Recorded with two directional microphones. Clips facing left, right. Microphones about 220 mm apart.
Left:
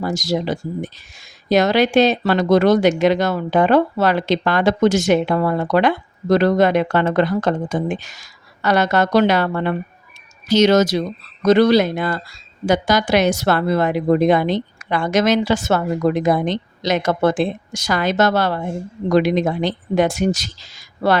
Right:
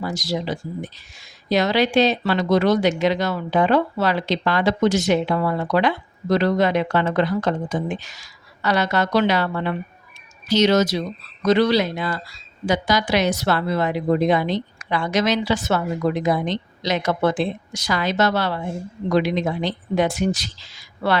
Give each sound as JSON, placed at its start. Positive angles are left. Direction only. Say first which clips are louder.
{"t": 0.0, "sound": "a woman's voice", "louder": "left 4 dB", "side_deg": 45}